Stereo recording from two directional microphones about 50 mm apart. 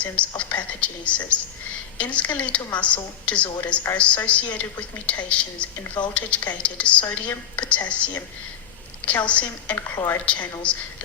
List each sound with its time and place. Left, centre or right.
0.0 s a woman's voice: left
7.1 s a woman's voice: left
7.6 s a woman's voice: left
9.7 s a woman's voice: left
10.2 s a woman's voice: left